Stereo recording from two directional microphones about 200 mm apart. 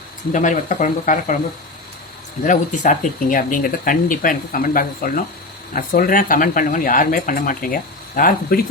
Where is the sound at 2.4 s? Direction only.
40° left (ahead or behind).